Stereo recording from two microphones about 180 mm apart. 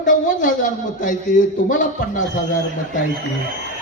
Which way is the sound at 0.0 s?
45° left (ahead or behind).